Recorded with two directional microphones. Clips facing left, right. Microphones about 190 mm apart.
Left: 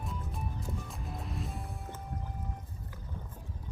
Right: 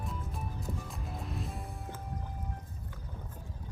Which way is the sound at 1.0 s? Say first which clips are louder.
Even; centre (ahead or behind).